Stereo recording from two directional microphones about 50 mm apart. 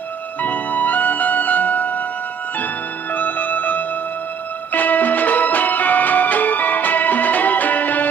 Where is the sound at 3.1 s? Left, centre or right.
Left.